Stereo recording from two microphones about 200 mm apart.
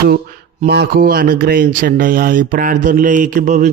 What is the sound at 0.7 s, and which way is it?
Speech, 50° right (ahead or behind).